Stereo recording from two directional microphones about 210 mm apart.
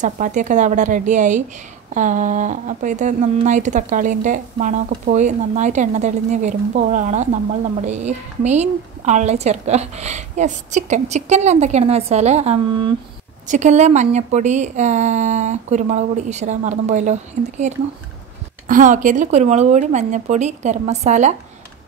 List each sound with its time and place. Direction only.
0.0 s speech: 35° right (ahead or behind)